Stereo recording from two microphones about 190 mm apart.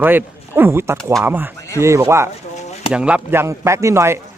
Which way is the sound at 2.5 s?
35° left (ahead or behind).